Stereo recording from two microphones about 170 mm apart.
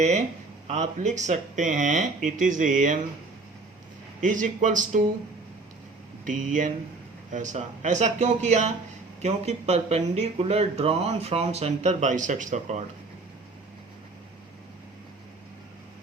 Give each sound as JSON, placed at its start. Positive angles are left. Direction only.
{"t": 0.7, "sound": "speech", "side_deg": -45}
{"t": 4.2, "sound": "speech", "side_deg": -50}
{"t": 6.2, "sound": "speech", "side_deg": -50}